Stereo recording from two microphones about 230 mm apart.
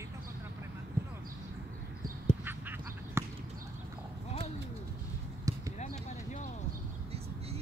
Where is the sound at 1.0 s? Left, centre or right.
Centre.